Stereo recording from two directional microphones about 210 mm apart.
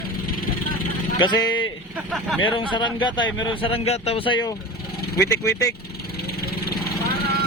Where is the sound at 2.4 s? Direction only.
20° left (ahead or behind).